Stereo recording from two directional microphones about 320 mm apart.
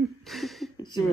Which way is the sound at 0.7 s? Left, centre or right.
Centre.